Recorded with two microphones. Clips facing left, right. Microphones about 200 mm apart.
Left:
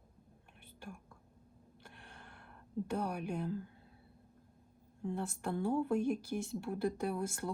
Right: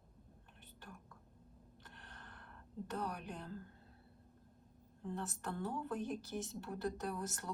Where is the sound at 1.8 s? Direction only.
10° left (ahead or behind).